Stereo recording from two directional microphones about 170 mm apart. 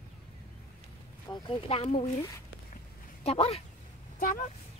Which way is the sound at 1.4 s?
35° left (ahead or behind).